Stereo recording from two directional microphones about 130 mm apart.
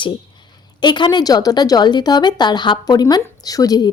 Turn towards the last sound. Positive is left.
turn(degrees=30)  # may be behind; listen again after turning